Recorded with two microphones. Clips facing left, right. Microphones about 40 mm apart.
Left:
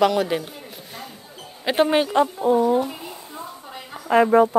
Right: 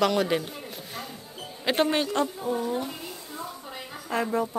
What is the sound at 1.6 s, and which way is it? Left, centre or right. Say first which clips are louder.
Speech: left 5 dB; centre.